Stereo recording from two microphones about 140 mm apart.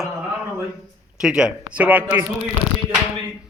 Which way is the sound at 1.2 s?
5° right (ahead or behind).